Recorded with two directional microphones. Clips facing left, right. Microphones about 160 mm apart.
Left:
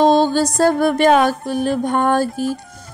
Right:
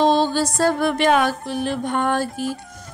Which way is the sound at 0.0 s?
45° left (ahead or behind).